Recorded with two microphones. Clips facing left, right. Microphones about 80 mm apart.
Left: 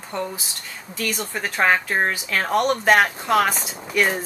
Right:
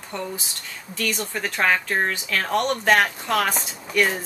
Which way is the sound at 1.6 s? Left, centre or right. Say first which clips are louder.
Left 2 dB; centre.